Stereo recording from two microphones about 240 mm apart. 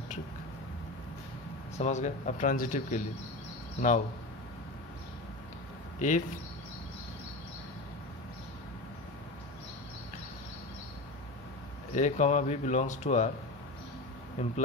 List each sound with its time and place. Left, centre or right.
1.8 s speech: left
5.9 s speech: left
11.9 s speech: left
14.4 s speech: left